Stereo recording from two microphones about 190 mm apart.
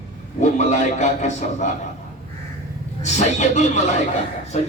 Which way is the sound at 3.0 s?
35° left (ahead or behind).